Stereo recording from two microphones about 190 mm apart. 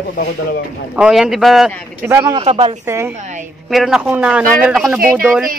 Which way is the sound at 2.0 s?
15° right (ahead or behind).